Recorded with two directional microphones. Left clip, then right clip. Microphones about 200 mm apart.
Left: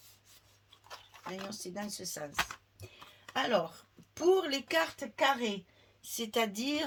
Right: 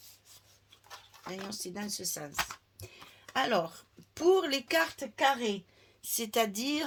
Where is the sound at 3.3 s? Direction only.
40° right (ahead or behind).